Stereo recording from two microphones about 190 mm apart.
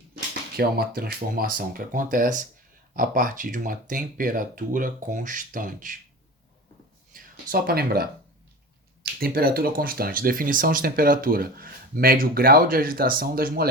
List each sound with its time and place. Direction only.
0.5 s speech: 50° right (ahead or behind)
7.1 s speech: 50° right (ahead or behind)
9.2 s speech: 50° right (ahead or behind)